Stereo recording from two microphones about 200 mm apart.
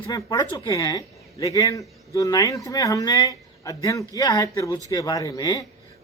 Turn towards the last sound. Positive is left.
turn(degrees=20)  # may be behind; listen again after turning